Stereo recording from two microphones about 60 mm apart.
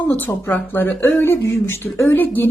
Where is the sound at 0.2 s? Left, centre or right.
Left.